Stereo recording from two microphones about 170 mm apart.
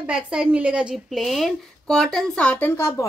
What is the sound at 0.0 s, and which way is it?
Speech, 5° right (ahead or behind).